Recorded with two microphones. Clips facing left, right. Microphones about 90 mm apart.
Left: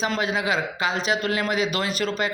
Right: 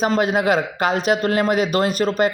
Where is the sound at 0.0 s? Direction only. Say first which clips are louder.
Right 6 dB; 50° right (ahead or behind).